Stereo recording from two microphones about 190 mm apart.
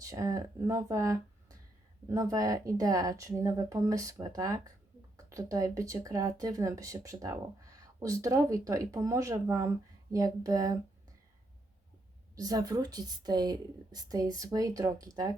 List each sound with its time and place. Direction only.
0.0 s speech: 20° right (ahead or behind)
12.4 s a woman's voice: 20° right (ahead or behind)